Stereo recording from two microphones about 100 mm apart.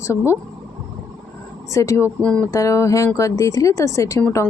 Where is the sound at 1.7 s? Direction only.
30° left (ahead or behind).